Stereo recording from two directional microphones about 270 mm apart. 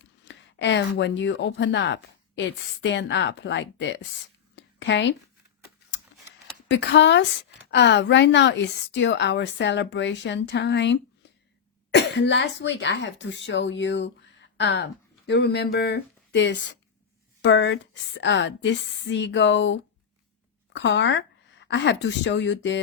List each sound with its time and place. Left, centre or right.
0.3 s speech: left
4.5 s a sound: left
6.7 s speech: left